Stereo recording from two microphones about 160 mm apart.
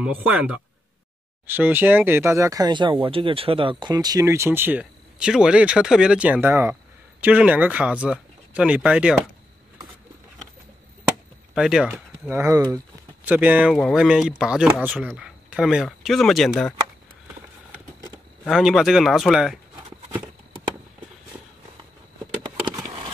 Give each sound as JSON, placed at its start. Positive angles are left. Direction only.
{"t": 0.0, "sound": "speech", "side_deg": -10}
{"t": 11.5, "sound": "speech", "side_deg": -5}
{"t": 18.4, "sound": "speech", "side_deg": 0}
{"t": 22.4, "sound": "a sound", "side_deg": -25}